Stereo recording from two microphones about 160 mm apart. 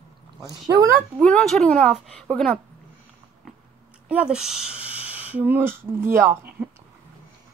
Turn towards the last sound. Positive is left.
turn(degrees=-15)  # may be behind; listen again after turning